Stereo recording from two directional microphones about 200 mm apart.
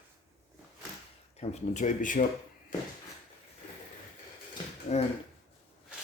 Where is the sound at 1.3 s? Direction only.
35° left (ahead or behind).